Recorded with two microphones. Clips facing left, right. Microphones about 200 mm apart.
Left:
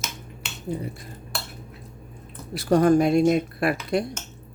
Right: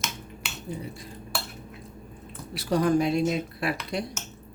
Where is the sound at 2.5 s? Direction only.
50° left (ahead or behind).